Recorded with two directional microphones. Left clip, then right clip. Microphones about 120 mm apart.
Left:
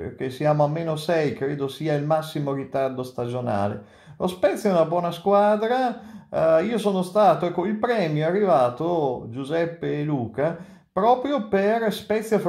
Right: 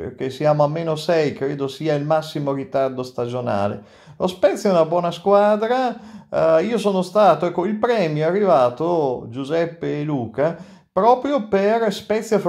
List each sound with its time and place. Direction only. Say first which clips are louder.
0.2 s speech: right 4 dB; 15° right (ahead or behind)